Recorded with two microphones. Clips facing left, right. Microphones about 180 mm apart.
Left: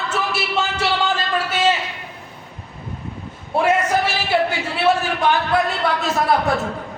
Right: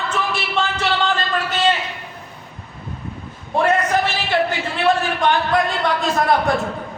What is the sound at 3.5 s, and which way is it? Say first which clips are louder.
Speech: even; 10° left (ahead or behind).